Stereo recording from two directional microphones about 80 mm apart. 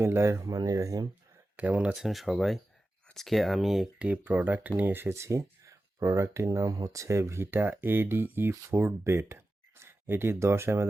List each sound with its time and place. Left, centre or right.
0.0 s speech: right
1.5 s speech: centre
2.0 s speech: centre
3.9 s speech: centre